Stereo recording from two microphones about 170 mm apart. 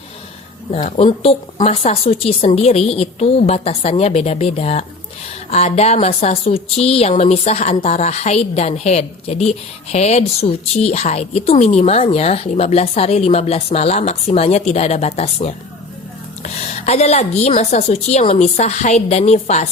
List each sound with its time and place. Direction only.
0.7 s a woman's voice: 35° left (ahead or behind)